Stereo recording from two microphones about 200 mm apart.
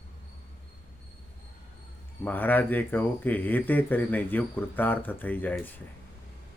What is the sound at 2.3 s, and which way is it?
Speech, 10° left (ahead or behind).